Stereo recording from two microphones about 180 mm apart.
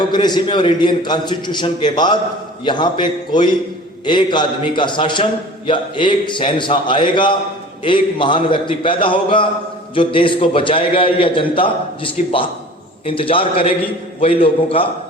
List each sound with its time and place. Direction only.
0.1 s a man's voice: 25° left (ahead or behind)